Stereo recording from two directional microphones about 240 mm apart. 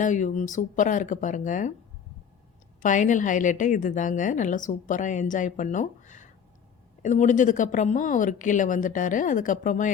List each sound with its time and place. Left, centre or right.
0.0 s a woman's voice: left
2.8 s a woman's voice: left